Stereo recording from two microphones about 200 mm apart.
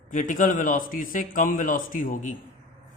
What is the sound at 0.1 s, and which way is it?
A man's voice, 40° left (ahead or behind).